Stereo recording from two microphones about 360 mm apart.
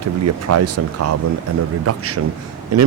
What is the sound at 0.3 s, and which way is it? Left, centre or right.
A man's voice, right.